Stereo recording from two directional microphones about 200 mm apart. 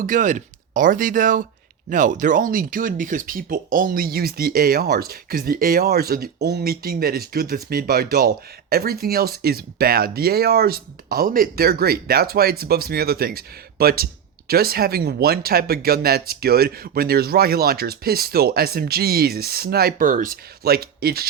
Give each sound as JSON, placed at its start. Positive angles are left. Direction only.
{"t": 0.0, "sound": "speech", "side_deg": -40}